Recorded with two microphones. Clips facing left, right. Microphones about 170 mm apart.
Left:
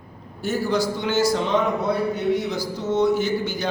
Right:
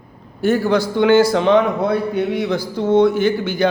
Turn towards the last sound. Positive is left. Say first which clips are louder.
# right 7 dB
turn(degrees=-60)  # may be behind; listen again after turning